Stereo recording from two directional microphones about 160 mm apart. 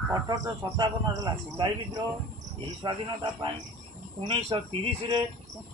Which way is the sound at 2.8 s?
30° right (ahead or behind).